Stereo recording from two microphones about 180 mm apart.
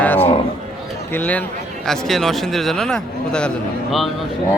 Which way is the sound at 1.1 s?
10° left (ahead or behind).